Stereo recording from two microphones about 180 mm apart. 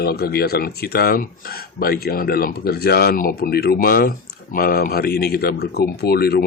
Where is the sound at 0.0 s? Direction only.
60° left (ahead or behind).